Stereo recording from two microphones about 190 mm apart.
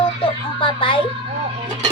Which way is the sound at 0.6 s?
25° left (ahead or behind).